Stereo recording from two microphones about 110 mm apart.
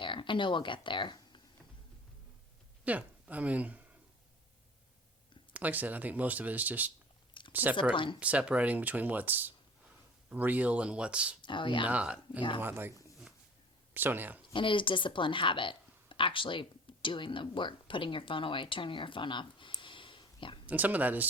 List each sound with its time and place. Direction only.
0.0 s speech: 50° left (ahead or behind)
2.8 s a woman's voice: 15° right (ahead or behind)
5.5 s speech: 15° right (ahead or behind)
7.9 s speech: 50° left (ahead or behind)
8.2 s speech: 10° right (ahead or behind)
11.4 s speech: 50° left (ahead or behind)
11.9 s speech: 10° right (ahead or behind)
12.4 s speech: 50° left (ahead or behind)
12.6 s speech: 20° right (ahead or behind)
13.9 s speech: 15° right (ahead or behind)
14.5 s speech: 50° left (ahead or behind)
19.8 s whispering: 50° left (ahead or behind)
20.7 s speech: 15° right (ahead or behind)